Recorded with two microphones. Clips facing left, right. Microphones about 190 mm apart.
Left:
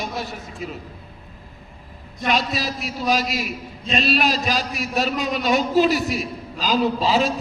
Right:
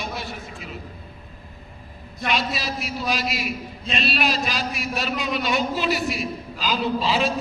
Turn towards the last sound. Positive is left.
turn(degrees=40)  # may be behind; listen again after turning